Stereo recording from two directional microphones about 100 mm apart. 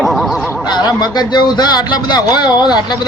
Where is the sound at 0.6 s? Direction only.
45° left (ahead or behind).